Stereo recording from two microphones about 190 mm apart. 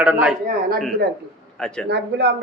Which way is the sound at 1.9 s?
60° right (ahead or behind).